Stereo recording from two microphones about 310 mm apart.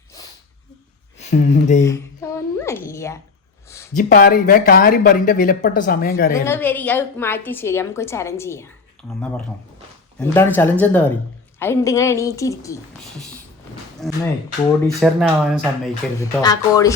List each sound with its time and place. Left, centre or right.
1.2 s speech: left
1.8 s a sound: centre
3.9 s speech: left
6.3 s a woman's voice: centre
10.2 s a woman's voice: centre
16.4 s a woman's voice: centre